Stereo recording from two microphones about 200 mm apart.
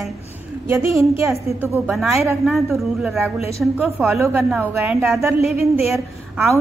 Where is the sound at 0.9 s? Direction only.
15° right (ahead or behind).